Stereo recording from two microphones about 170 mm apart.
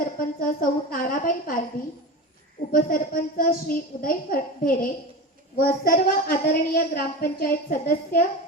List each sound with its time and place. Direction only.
0.2 s a woman's voice: 55° left (ahead or behind)
2.7 s a woman's voice: 55° left (ahead or behind)